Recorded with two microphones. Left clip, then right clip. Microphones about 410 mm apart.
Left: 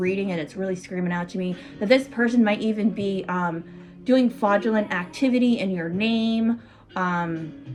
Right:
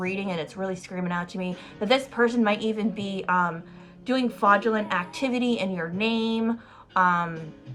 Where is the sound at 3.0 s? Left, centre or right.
Centre.